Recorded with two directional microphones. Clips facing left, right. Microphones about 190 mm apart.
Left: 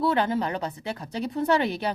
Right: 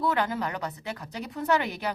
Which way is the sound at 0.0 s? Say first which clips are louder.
Left 3 dB; 30° left (ahead or behind).